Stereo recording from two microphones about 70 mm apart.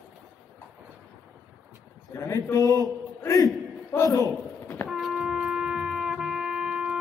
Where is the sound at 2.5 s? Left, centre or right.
Left.